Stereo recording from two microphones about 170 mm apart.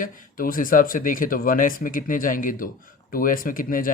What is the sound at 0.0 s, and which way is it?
Speech, 55° left (ahead or behind).